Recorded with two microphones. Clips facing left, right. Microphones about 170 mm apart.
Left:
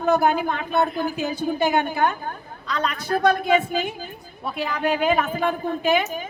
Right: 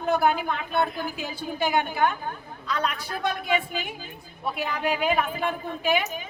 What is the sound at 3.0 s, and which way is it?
Speech, 40° left (ahead or behind).